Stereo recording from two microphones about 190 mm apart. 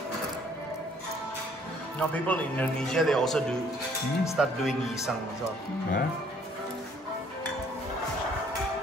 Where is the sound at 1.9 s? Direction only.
5° left (ahead or behind).